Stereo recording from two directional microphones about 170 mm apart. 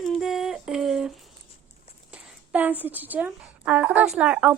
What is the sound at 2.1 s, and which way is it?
Speech, 10° right (ahead or behind).